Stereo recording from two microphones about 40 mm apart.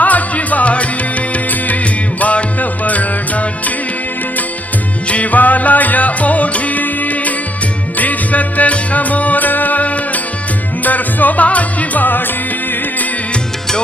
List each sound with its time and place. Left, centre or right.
0.0 s music: left
5.0 s music: left